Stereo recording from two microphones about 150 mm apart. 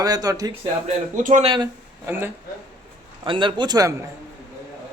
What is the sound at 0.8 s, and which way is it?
Speech, 55° right (ahead or behind).